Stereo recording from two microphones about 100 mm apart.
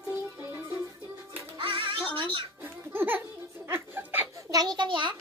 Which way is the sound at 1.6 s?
60° right (ahead or behind).